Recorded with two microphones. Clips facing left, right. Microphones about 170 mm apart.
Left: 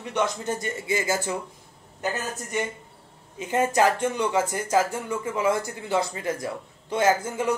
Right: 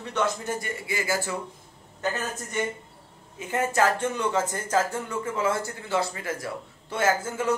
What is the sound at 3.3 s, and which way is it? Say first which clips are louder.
Speech: left 2 dB; 20° left (ahead or behind).